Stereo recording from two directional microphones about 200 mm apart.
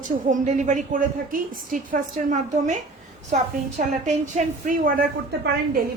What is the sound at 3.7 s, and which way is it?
A woman's voice, 35° right (ahead or behind).